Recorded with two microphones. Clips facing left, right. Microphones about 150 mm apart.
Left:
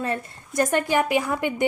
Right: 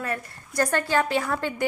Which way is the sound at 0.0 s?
25° left (ahead or behind).